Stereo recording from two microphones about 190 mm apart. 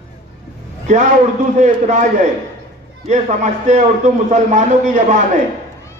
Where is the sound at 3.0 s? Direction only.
40° right (ahead or behind).